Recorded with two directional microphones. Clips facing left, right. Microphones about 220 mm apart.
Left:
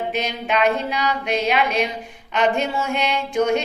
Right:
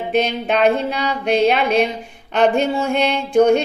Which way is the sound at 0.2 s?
35° right (ahead or behind).